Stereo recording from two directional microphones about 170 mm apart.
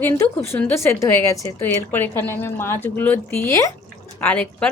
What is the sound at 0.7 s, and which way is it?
A woman's voice, 15° left (ahead or behind).